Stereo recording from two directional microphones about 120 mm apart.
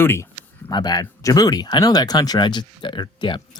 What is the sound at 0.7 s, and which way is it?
Speech, 35° left (ahead or behind).